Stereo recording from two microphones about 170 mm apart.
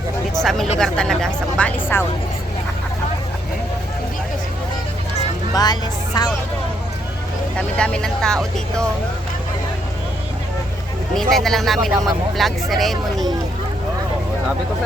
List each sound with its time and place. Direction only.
0.4 s speech: centre (ahead or behind)
5.1 s vehicle: 20° left (ahead or behind)
7.5 s speech: 5° left (ahead or behind)
11.1 s speech: centre (ahead or behind)